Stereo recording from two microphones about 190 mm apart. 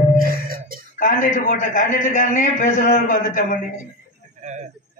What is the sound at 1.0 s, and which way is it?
A man's voice, 45° left (ahead or behind).